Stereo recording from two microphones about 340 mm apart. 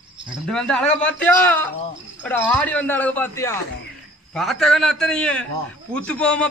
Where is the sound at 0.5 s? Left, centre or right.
Centre.